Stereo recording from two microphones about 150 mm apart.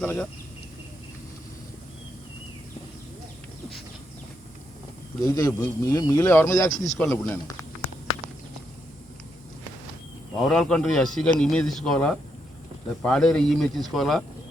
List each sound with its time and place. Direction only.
0.0 s speech: 10° left (ahead or behind)
5.2 s speech: 25° left (ahead or behind)
6.8 s speech: centre (ahead or behind)
7.1 s speech: 20° left (ahead or behind)
10.3 s speech: 5° left (ahead or behind)